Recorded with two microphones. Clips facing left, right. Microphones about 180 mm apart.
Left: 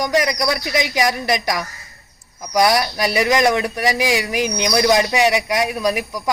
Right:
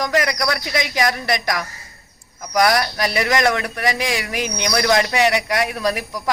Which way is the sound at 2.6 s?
10° left (ahead or behind).